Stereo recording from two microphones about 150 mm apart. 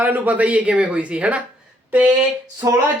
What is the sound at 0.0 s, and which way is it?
Speech, 10° right (ahead or behind).